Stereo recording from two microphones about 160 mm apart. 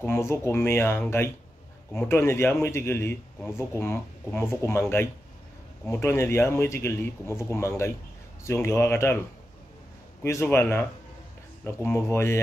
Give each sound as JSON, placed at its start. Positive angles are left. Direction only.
{"t": 0.0, "sound": "a man's voice", "side_deg": 15}
{"t": 10.2, "sound": "a man's voice", "side_deg": 15}